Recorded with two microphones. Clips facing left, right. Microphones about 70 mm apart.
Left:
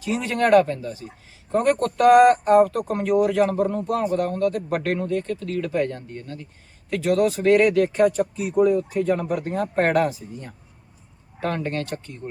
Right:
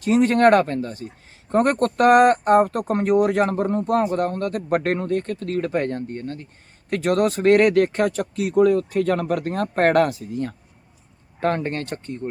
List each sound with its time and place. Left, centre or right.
0.0 s speech: right
11.3 s speech: right